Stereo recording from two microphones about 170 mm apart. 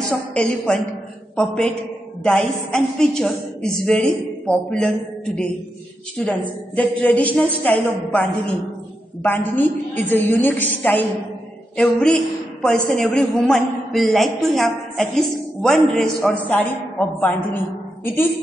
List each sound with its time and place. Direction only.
0.3 s a woman's voice: 10° left (ahead or behind)
2.7 s a woman's voice: 5° left (ahead or behind)
18.0 s a woman's voice: 10° left (ahead or behind)